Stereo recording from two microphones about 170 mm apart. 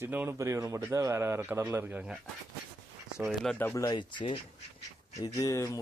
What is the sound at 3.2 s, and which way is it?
Speech, 5° right (ahead or behind).